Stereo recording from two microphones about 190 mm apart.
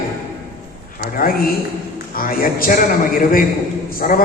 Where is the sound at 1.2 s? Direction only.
50° left (ahead or behind).